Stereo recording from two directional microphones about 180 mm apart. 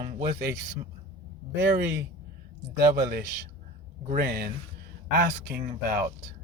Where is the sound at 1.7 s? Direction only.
65° right (ahead or behind).